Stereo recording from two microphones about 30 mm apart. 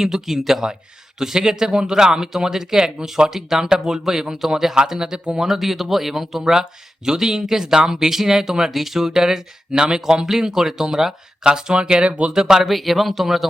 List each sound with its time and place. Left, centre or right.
0.0 s speech: centre
5.4 s speech: centre
11.4 s speech: right
12.3 s speech: right
12.6 s speech: centre